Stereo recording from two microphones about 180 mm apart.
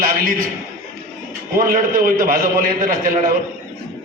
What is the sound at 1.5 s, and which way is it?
A man's voice, 50° right (ahead or behind).